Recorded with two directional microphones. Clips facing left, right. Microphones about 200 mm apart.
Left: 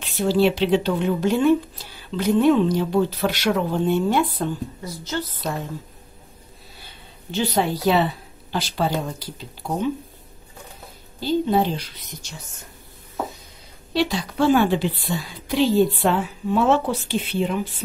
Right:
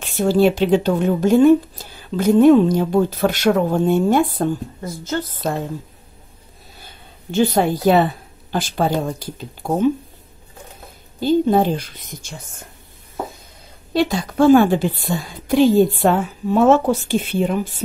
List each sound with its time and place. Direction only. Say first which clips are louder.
0.0 s speech: right 4 dB; 45° right (ahead or behind)
6.8 s a woman's voice: right 2 dB; 50° right (ahead or behind)
11.1 s speech: right 5 dB; 50° right (ahead or behind)
13.9 s speech: right 4 dB; 50° right (ahead or behind)